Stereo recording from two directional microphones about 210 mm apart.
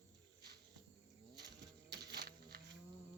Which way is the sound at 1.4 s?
50° right (ahead or behind).